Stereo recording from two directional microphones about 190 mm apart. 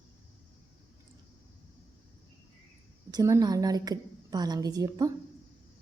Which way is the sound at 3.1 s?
20° right (ahead or behind).